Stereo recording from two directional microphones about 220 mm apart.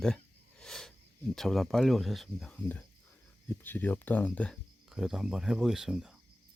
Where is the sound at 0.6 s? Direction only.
Centre (ahead or behind).